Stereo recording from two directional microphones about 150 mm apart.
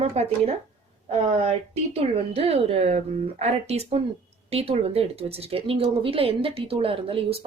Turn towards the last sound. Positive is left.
turn(degrees=-40)  # may be behind; listen again after turning